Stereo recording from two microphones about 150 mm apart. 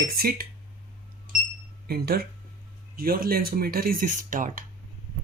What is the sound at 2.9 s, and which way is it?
Speech, 80° right.